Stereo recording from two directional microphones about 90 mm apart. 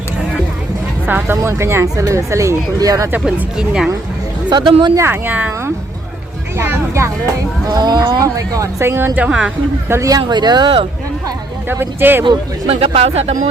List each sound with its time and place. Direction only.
1.0 s speech: 20° right (ahead or behind); by 3.1 s 45° right (ahead or behind)
3.3 s speech: 10° right (ahead or behind)
4.4 s speech: 55° right (ahead or behind)
4.9 s speech: 25° right (ahead or behind)
6.6 s speech: 30° right (ahead or behind)
7.7 s speech: 50° right (ahead or behind); by 9.3 s 20° right (ahead or behind)
9.9 s speech: 40° right (ahead or behind)
11.7 s speech: 25° right (ahead or behind)
12.2 s speech: 75° right (ahead or behind)